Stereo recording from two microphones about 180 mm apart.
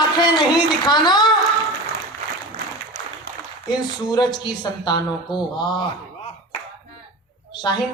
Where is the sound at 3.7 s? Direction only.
25° left (ahead or behind).